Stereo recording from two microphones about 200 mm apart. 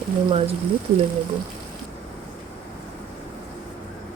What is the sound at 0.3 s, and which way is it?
Speech, 30° right (ahead or behind).